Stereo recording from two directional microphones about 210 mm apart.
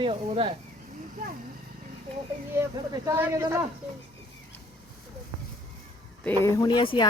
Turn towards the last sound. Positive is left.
turn(degrees=20)  # may be behind; listen again after turning